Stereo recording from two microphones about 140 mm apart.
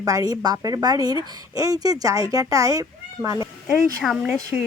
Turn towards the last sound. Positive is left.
turn(degrees=0)  # may be behind; listen again after turning